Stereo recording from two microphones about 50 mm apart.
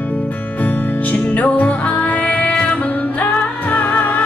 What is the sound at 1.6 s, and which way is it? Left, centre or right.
Music, left.